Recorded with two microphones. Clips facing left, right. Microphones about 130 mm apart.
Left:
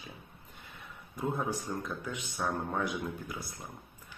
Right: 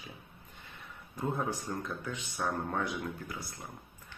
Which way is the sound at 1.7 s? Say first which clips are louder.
Left 1 dB; 5° left (ahead or behind).